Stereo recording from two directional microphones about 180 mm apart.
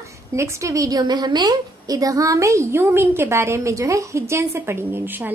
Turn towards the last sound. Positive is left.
turn(degrees=-10)  # may be behind; listen again after turning